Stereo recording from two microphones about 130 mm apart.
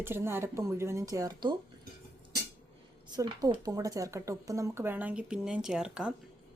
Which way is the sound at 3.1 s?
30° right (ahead or behind).